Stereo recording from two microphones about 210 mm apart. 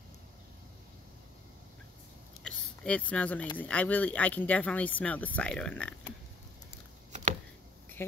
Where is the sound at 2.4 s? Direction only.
Centre (ahead or behind).